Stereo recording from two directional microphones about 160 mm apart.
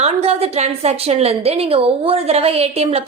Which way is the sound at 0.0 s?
40° right (ahead or behind).